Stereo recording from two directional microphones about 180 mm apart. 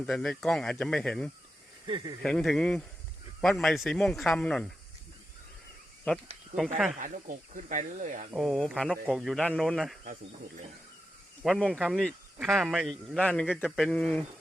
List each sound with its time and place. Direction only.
0.0 s a man's voice: 5° left (ahead or behind)
7.0 s speech: 45° right (ahead or behind)
8.4 s a man's voice: centre (ahead or behind)
11.4 s a man's voice: centre (ahead or behind)